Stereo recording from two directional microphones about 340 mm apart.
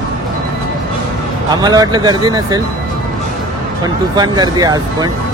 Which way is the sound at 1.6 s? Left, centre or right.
Centre.